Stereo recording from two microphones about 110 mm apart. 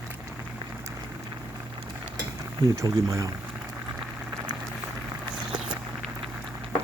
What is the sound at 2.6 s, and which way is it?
Speech, 30° right (ahead or behind).